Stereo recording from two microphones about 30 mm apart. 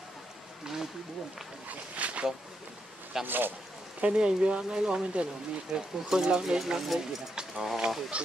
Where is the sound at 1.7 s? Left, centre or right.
Right.